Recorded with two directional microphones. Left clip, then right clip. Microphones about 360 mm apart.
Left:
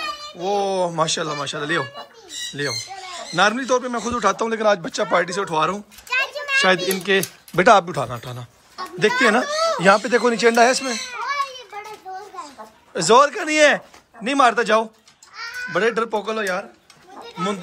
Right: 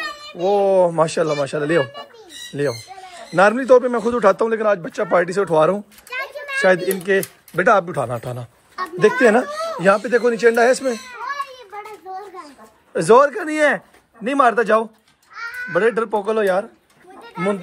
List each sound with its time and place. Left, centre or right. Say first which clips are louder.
0.4 s a man's voice: right 6 dB; centre
6.0 s children playing: left 8 dB; centre
6.6 s a man's voice: right 4 dB; centre
12.9 s a man's voice: right 2 dB; centre